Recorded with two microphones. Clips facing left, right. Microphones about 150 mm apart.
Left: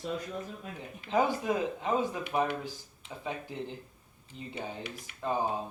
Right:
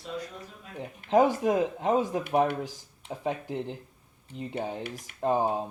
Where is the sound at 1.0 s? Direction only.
65° right (ahead or behind).